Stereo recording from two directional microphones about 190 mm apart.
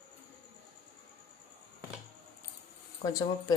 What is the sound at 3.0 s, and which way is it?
Speech, 20° left (ahead or behind).